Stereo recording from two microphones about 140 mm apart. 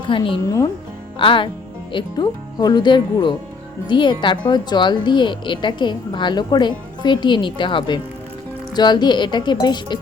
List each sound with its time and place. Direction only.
0.1 s speech: 35° left (ahead or behind)
0.4 s speech: 25° left (ahead or behind)
1.2 s speech: 35° left (ahead or behind)